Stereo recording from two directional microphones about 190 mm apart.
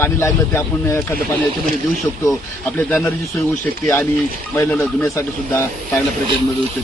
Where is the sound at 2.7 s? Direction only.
10° left (ahead or behind).